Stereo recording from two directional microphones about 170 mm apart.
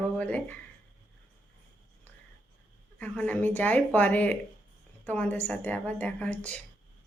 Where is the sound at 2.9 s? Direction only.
10° left (ahead or behind).